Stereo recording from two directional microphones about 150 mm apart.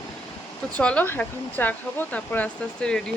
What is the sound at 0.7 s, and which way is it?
Speech, 10° left (ahead or behind).